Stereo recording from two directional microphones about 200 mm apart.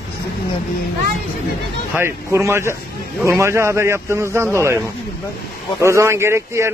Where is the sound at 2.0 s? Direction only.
15° right (ahead or behind).